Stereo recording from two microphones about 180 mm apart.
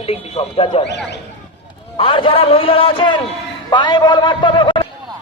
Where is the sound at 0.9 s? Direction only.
70° left (ahead or behind).